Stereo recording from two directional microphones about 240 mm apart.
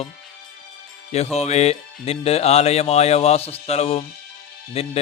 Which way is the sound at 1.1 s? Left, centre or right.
Left.